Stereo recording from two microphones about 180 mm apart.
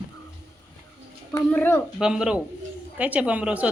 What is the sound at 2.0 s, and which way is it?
A woman's voice, 5° right (ahead or behind).